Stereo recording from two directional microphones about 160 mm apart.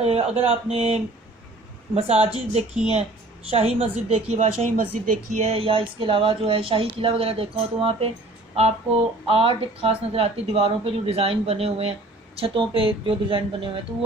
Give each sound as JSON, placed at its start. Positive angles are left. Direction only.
{"t": 0.0, "sound": "speech", "side_deg": -40}
{"t": 9.2, "sound": "speech", "side_deg": -35}